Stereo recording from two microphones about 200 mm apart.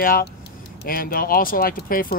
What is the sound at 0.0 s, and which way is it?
Speech, 45° left (ahead or behind).